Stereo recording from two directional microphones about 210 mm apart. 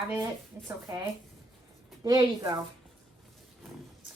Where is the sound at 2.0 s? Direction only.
20° right (ahead or behind).